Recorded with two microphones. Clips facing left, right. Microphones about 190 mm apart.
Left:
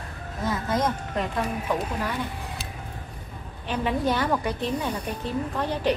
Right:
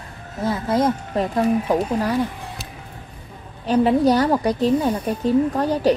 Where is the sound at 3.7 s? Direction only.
40° right (ahead or behind).